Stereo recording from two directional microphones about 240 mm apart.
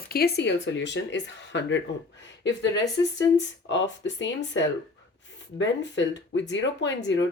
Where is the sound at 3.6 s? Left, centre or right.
Left.